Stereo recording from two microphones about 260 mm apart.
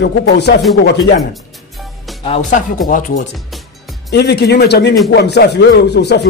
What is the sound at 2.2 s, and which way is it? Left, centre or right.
Speech, left.